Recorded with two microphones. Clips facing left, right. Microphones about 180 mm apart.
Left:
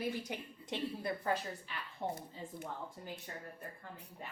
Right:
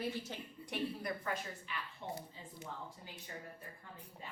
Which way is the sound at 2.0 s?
45° left (ahead or behind).